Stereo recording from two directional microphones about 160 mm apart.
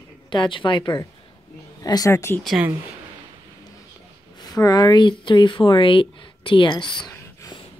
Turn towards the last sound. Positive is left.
turn(degrees=30)  # may be behind; listen again after turning